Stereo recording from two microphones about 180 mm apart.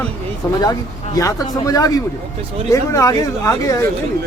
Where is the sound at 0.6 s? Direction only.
20° left (ahead or behind).